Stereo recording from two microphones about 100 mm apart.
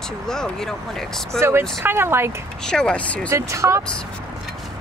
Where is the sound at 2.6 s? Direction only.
5° left (ahead or behind).